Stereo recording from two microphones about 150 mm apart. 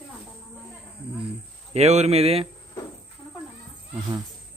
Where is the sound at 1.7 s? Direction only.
45° right (ahead or behind).